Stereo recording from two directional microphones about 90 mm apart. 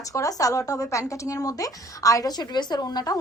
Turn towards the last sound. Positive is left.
turn(degrees=50)  # may be behind; listen again after turning